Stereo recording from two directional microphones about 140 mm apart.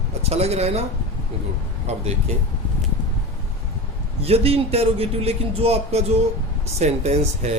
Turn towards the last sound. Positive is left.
turn(degrees=-50)  # may be behind; listen again after turning